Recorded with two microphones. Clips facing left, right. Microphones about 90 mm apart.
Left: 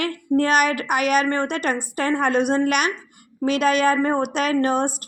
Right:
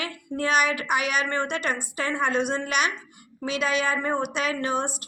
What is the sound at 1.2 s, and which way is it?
A woman's voice, 40° left (ahead or behind).